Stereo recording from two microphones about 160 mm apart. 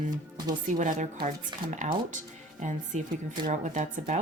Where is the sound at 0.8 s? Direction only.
50° right (ahead or behind).